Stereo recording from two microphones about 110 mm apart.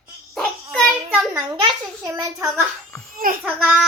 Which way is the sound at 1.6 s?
40° right (ahead or behind).